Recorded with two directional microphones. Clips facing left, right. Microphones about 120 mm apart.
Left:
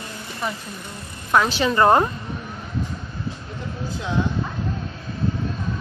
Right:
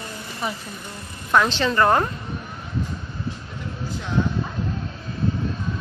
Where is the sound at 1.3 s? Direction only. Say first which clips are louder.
Even; 5° left (ahead or behind).